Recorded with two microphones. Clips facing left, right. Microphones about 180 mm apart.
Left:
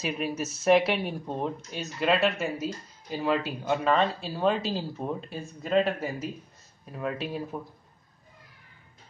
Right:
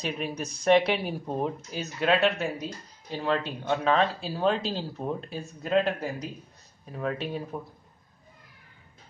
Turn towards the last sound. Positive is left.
turn(degrees=0)  # may be behind; listen again after turning